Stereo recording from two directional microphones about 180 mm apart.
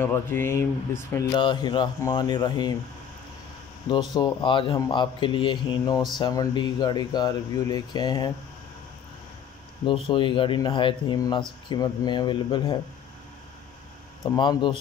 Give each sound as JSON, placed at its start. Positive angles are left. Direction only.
{"t": 0.0, "sound": "speech", "side_deg": 10}
{"t": 1.3, "sound": "speech", "side_deg": 25}
{"t": 3.9, "sound": "speech", "side_deg": 25}
{"t": 9.8, "sound": "speech", "side_deg": 25}
{"t": 14.2, "sound": "speech", "side_deg": 20}